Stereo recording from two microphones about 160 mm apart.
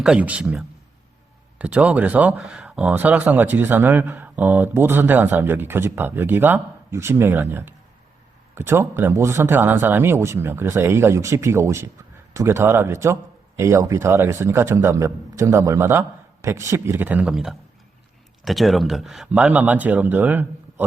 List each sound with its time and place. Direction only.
0.0 s speech: 5° right (ahead or behind)